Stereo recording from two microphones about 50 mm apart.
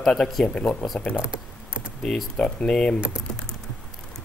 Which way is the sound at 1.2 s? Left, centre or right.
Right.